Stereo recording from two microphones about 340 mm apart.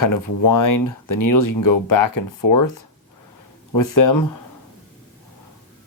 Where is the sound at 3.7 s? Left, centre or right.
Left.